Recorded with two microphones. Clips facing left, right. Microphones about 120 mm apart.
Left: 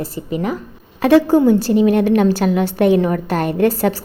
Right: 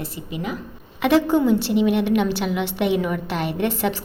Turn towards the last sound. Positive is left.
turn(degrees=40)  # may be behind; listen again after turning